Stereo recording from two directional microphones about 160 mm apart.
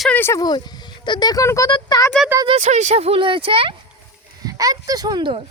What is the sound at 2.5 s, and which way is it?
Speech, 45° right (ahead or behind).